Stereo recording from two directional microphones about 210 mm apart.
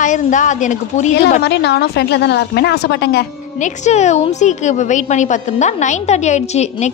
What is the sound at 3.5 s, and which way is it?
A woman's voice, 35° left (ahead or behind).